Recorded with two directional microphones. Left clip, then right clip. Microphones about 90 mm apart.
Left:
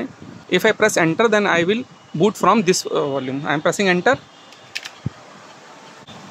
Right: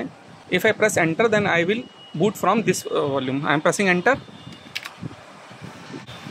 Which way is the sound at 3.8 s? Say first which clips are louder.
Left 2 dB; 15° left (ahead or behind).